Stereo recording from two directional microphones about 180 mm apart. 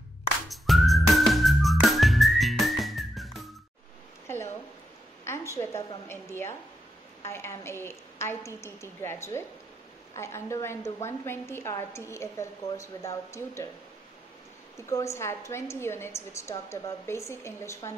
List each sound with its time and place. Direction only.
0.5 s whistling: centre (ahead or behind)
5.2 s a woman's voice: 15° left (ahead or behind)
14.8 s a woman's voice: 15° left (ahead or behind)